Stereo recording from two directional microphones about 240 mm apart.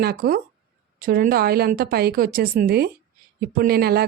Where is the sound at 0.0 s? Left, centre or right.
Right.